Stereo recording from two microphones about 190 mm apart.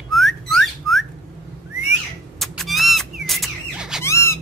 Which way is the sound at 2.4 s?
Centre (ahead or behind).